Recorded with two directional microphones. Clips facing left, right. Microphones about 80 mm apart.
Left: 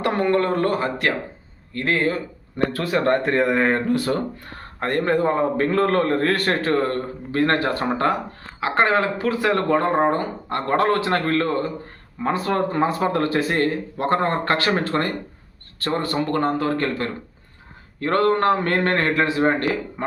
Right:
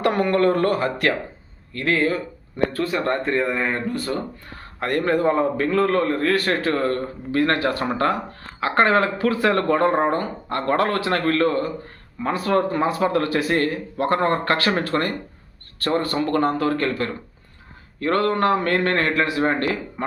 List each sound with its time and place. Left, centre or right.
0.0 s a man's voice: left
2.7 s speech: left
4.8 s a man's voice: left
5.5 s a man's voice: left